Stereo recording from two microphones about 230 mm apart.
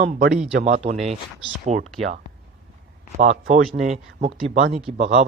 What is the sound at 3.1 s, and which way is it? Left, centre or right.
Speech, right.